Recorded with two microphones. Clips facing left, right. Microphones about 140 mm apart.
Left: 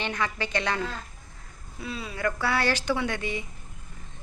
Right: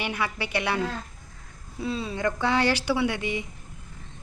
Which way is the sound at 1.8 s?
25° right (ahead or behind).